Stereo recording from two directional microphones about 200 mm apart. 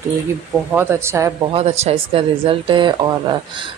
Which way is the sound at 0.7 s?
10° right (ahead or behind).